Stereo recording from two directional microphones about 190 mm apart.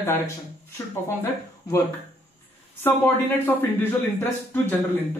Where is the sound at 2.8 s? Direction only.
10° left (ahead or behind).